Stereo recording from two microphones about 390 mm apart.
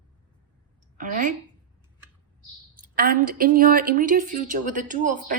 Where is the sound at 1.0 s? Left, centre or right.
Centre.